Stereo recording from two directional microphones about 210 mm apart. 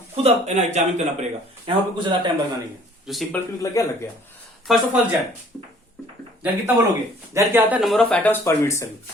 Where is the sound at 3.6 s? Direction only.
15° left (ahead or behind).